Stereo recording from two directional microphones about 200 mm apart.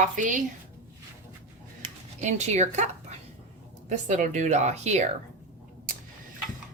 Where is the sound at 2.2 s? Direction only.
35° right (ahead or behind).